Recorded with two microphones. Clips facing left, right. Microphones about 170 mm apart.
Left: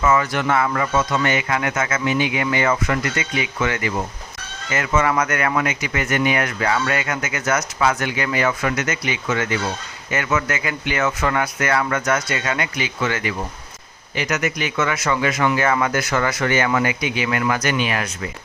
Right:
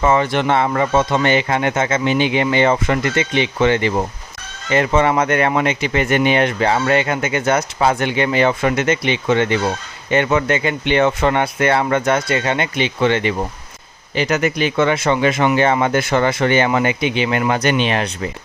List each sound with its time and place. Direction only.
0.0 s speech: 30° right (ahead or behind)